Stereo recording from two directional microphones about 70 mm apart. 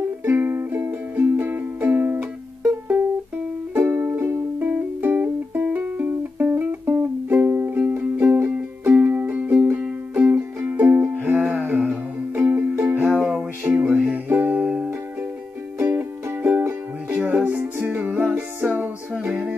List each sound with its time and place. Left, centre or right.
0.2 s music: right
3.8 s music: right
4.6 s music: right
6.5 s music: right
15.8 s music: right
17.1 s music: right